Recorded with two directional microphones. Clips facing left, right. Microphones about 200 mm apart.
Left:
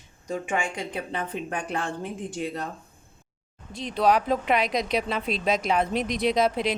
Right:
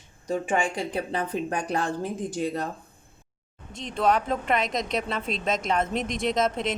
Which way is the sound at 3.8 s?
Centre (ahead or behind).